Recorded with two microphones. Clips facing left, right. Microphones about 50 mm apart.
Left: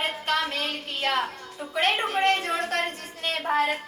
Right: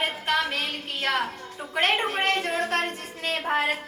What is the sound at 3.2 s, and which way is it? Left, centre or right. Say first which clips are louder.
Speech: left 1 dB; right.